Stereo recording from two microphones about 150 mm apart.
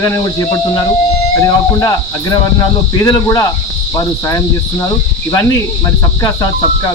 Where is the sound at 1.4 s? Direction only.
25° left (ahead or behind).